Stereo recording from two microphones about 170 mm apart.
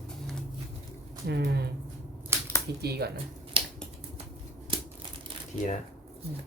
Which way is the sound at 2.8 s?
70° right (ahead or behind).